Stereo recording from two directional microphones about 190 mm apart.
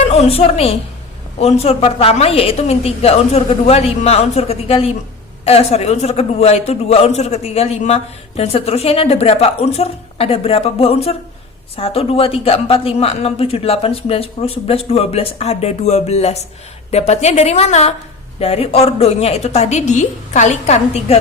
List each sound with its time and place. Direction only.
0.1 s a man's voice: 35° left (ahead or behind)